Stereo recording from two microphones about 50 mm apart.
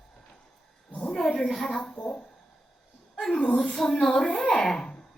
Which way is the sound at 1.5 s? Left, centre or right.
Centre.